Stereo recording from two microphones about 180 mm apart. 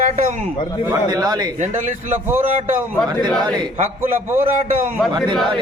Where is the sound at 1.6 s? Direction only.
45° right (ahead or behind).